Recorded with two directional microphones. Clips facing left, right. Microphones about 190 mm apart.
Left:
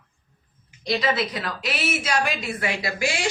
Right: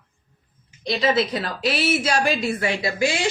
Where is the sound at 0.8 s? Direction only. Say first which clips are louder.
Right 3 dB; 25° right (ahead or behind).